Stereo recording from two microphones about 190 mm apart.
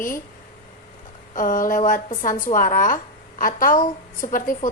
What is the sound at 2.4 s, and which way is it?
A woman's voice, 45° left (ahead or behind).